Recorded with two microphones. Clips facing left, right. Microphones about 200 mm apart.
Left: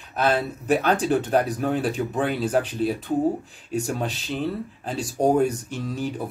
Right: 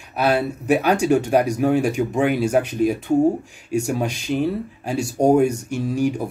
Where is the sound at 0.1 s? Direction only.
10° right (ahead or behind).